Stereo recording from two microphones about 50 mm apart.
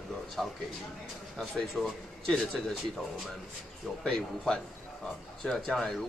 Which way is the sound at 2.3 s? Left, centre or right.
Centre.